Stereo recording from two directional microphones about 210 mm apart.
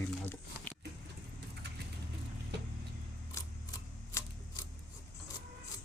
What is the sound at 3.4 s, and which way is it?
Scissors, 15° left (ahead or behind).